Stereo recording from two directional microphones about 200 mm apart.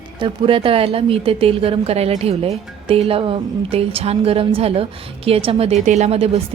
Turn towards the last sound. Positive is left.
turn(degrees=-30)  # may be behind; listen again after turning